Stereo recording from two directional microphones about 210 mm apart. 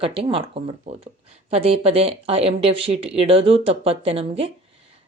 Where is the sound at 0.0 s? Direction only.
25° right (ahead or behind).